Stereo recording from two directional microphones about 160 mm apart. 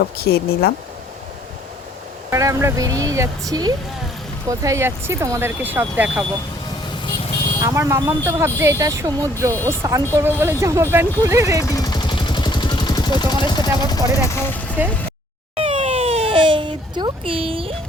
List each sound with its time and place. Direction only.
0.0 s speech: 75° left (ahead or behind)
2.3 s speech: 20° right (ahead or behind)
7.6 s speech: 20° right (ahead or behind)
11.6 s vehicle: 20° left (ahead or behind)
13.8 s speech: 25° left (ahead or behind)
14.8 s speech: 10° right (ahead or behind)
15.5 s a sound: 35° right (ahead or behind)